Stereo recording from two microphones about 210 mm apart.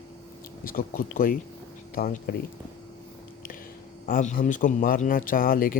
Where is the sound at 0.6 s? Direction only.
45° left (ahead or behind).